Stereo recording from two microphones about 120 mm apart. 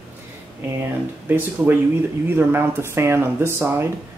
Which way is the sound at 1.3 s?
15° right (ahead or behind).